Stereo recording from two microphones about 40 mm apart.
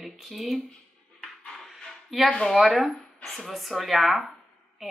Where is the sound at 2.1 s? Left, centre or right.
Centre.